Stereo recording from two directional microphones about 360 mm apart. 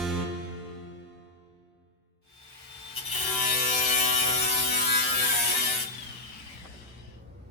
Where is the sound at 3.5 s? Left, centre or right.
Left.